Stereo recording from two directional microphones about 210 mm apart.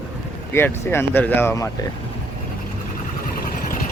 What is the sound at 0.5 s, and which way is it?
Speech, 10° left (ahead or behind).